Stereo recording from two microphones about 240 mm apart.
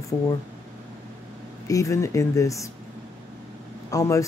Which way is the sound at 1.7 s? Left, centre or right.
Centre.